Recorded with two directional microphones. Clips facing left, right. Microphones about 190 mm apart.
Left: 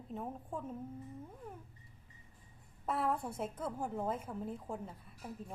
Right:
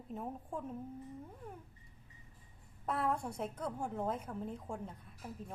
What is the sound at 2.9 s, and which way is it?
A woman's voice, centre (ahead or behind).